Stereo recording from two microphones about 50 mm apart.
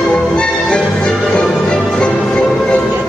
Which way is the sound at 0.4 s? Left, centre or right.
Centre.